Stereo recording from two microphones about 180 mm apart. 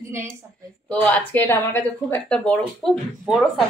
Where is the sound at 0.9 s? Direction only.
10° left (ahead or behind).